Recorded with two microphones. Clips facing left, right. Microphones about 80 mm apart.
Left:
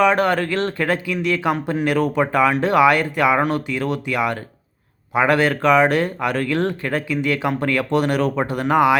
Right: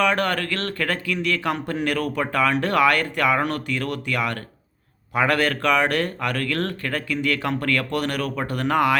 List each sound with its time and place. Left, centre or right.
0.0 s speech: centre